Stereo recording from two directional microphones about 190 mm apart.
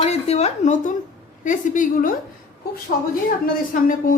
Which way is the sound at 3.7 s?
45° left (ahead or behind).